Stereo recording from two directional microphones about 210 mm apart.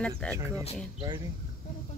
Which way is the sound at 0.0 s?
5° left (ahead or behind).